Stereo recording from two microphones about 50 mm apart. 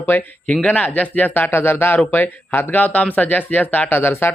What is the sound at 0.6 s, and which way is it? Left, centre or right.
Speech, left.